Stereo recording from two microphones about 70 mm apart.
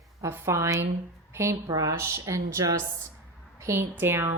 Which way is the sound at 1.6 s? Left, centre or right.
Right.